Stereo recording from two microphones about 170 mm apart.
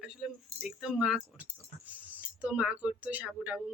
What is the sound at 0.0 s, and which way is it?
Speech, 5° right (ahead or behind).